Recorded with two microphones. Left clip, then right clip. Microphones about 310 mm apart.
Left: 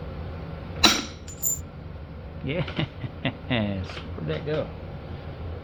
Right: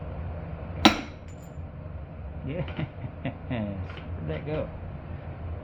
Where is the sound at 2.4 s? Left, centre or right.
Left.